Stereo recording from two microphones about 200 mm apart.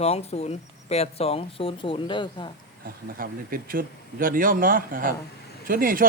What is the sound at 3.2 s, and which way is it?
Speech, 45° right (ahead or behind).